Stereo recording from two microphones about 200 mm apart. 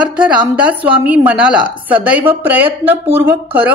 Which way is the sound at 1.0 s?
5° right (ahead or behind).